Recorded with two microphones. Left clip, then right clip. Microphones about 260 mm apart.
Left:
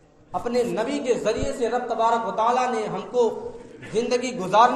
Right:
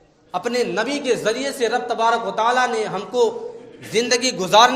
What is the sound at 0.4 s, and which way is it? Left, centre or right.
A man's voice, right.